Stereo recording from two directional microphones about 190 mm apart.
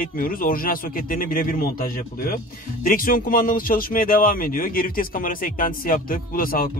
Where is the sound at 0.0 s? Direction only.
50° left (ahead or behind).